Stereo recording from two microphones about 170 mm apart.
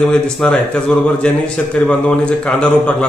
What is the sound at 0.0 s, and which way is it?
A man's voice, 5° left (ahead or behind).